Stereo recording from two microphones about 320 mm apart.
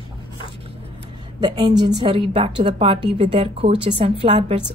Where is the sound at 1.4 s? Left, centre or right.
Centre.